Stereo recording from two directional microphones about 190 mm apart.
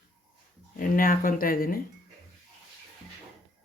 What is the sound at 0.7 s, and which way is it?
Speech, 45° left (ahead or behind).